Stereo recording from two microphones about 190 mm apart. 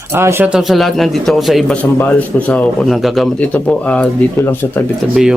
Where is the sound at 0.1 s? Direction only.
10° right (ahead or behind); by 4.8 s 10° left (ahead or behind).